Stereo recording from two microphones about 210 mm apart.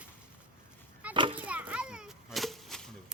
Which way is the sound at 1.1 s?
25° right (ahead or behind).